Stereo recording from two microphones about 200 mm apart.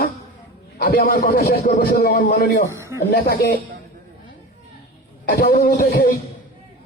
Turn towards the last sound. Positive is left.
turn(degrees=45)  # may be behind; listen again after turning